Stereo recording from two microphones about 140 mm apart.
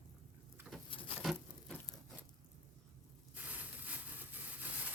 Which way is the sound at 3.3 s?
10° right (ahead or behind).